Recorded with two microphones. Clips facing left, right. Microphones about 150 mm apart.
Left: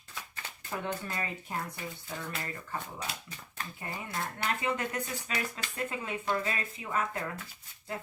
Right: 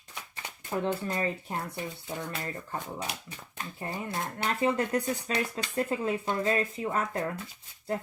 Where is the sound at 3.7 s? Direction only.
30° right (ahead or behind).